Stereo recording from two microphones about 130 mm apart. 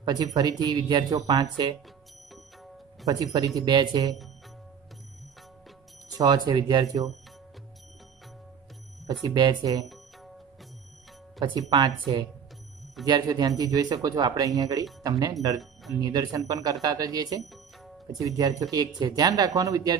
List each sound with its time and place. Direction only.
0.0 s speech: 30° right (ahead or behind)
2.3 s music: centre (ahead or behind)
3.3 s speech: 30° right (ahead or behind)
6.0 s speech: 30° right (ahead or behind)
9.0 s speech: 30° right (ahead or behind)
13.0 s speech: 30° right (ahead or behind)